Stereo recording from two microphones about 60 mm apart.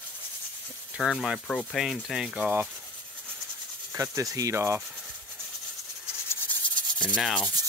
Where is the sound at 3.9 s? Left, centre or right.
Right.